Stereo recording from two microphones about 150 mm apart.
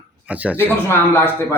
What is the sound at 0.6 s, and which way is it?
Speech, 15° left (ahead or behind).